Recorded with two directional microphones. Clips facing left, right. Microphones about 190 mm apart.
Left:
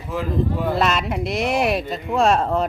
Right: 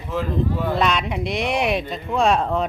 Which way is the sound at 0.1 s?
10° left (ahead or behind).